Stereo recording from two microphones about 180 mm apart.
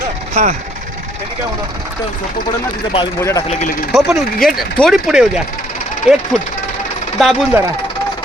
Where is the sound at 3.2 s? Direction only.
15° left (ahead or behind).